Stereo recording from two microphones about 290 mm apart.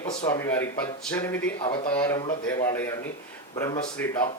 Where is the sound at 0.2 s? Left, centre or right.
Centre.